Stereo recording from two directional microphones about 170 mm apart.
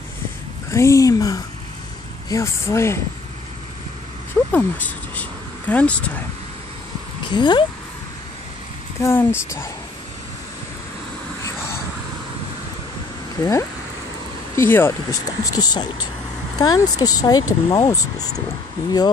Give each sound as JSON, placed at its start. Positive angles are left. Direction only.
{"t": 0.7, "sound": "a woman's voice", "side_deg": 15}
{"t": 4.5, "sound": "speech", "side_deg": 10}
{"t": 7.2, "sound": "speech", "side_deg": 25}
{"t": 9.0, "sound": "a woman's voice", "side_deg": 15}
{"t": 13.4, "sound": "a woman's voice", "side_deg": 20}